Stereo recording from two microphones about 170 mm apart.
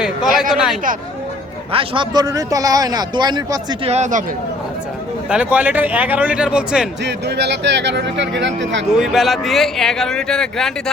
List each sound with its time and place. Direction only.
0.0 s a sound: 5° right (ahead or behind)
0.5 s speech: 5° right (ahead or behind)
1.7 s a man's voice: 30° right (ahead or behind)
3.8 s speech: 40° right (ahead or behind)
5.3 s a man's voice: 5° right (ahead or behind)
7.0 s speech: 90° right
9.0 s speech: centre (ahead or behind)